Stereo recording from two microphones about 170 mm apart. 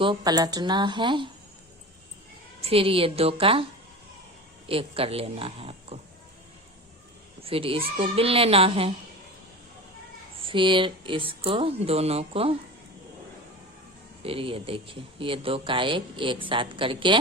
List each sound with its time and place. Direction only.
0.0 s a woman's voice: 25° right (ahead or behind)
2.6 s speech: 35° right (ahead or behind)
4.7 s speech: 35° right (ahead or behind)
7.4 s speech: 35° right (ahead or behind)
10.4 s speech: 30° right (ahead or behind)
14.2 s speech: 35° right (ahead or behind)